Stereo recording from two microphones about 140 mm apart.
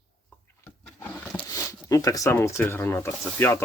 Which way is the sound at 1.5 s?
25° left (ahead or behind).